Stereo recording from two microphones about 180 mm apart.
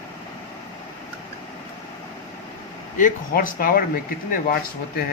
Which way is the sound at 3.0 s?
50° left (ahead or behind).